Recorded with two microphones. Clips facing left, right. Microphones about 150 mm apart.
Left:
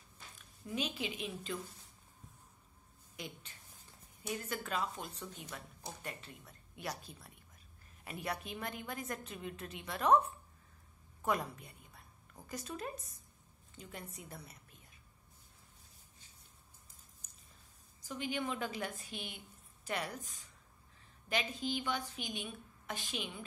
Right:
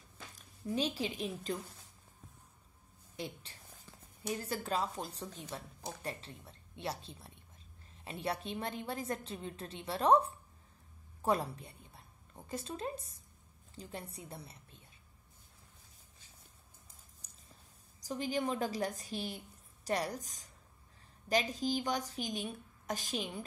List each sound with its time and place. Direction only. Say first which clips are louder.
0.7 s a woman's voice: right 4 dB; 35° right (ahead or behind)
3.2 s a woman's voice: right 5 dB; 35° right (ahead or behind)
18.0 s a woman's voice: right 4 dB; 35° right (ahead or behind)